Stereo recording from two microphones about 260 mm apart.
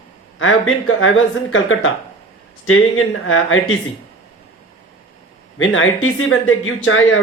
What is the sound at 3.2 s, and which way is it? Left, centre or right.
Speech, left.